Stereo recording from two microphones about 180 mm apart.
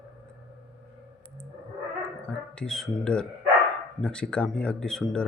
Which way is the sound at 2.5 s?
5° left (ahead or behind).